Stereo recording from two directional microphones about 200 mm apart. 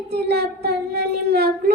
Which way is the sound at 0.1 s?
55° right (ahead or behind).